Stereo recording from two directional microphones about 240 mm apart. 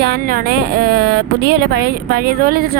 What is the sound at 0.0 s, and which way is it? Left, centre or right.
Speech, right.